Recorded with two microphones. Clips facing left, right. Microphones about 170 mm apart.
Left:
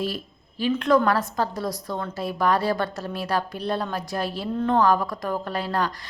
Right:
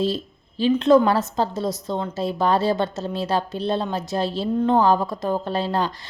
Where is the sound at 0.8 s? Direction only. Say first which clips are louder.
Right 4 dB; 25° right (ahead or behind).